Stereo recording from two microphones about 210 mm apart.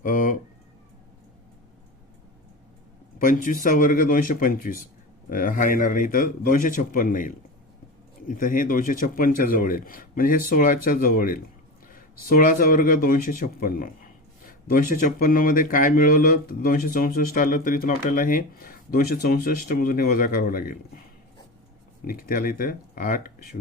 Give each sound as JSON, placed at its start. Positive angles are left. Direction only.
{"t": 0.0, "sound": "a sound", "side_deg": 40}
{"t": 3.2, "sound": "speech", "side_deg": 40}
{"t": 22.0, "sound": "speech", "side_deg": 45}